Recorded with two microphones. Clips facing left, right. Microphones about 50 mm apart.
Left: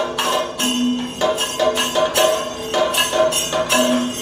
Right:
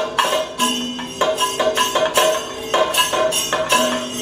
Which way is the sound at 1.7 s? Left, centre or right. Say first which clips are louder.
Right 1 dB; centre.